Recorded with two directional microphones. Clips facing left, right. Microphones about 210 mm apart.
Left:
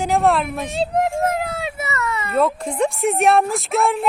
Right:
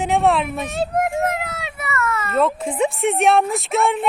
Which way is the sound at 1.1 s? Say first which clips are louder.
Left 1 dB; 30° left (ahead or behind).